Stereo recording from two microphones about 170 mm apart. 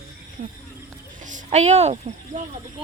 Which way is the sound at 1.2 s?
45° right (ahead or behind).